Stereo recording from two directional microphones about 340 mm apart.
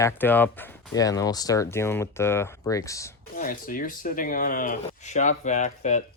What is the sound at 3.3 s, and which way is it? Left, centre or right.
Speech, left.